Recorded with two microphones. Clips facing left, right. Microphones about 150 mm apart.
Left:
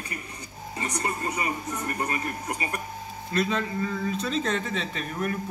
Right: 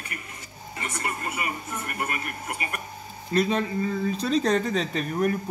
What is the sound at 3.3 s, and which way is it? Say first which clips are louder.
Speech: right 3 dB; 35° right (ahead or behind).